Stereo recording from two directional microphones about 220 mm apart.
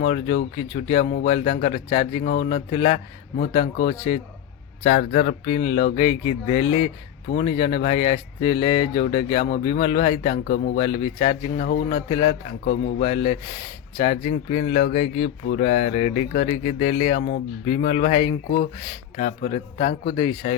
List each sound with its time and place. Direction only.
0.0 s speech: 25° left (ahead or behind)
2.2 s speech: 40° left (ahead or behind)
2.6 s speech: 25° left (ahead or behind)
4.1 s speech: 25° left (ahead or behind)
4.8 s speech: 40° left (ahead or behind)
12.6 s speech: 40° left (ahead or behind)
13.1 s speech: 25° left (ahead or behind)